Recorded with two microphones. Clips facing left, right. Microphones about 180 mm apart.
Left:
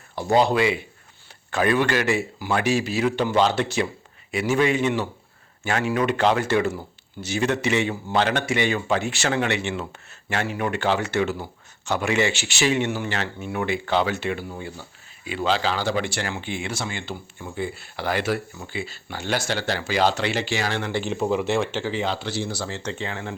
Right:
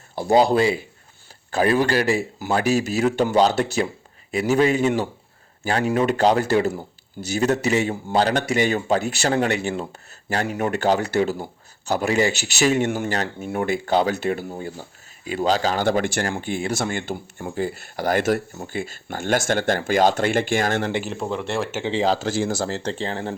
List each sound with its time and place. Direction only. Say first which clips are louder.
0.3 s speech: right 2 dB; 35° right (ahead or behind)
21.0 s speech: left 3 dB; centre (ahead or behind)
21.8 s speech: right 5 dB; 35° right (ahead or behind)